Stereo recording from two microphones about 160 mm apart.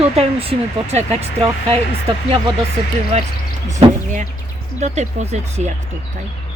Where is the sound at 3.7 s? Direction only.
50° right (ahead or behind).